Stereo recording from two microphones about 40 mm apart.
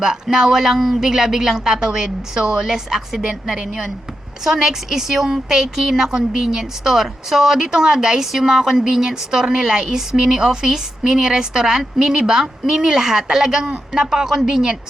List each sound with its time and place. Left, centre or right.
0.0 s speech: centre